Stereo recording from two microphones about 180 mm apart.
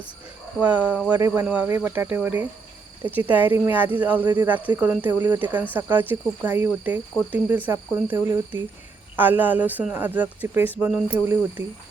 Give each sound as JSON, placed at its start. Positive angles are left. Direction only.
{"t": 0.6, "sound": "speech", "side_deg": -10}